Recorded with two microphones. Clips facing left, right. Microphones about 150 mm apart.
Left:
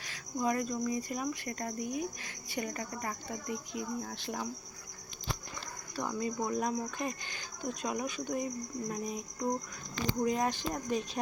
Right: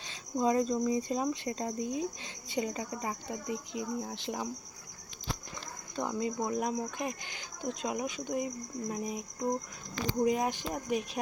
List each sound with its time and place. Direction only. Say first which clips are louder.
0.0 s speech: right 3 dB; 25° right (ahead or behind)
6.0 s speech: right 2 dB; 20° right (ahead or behind)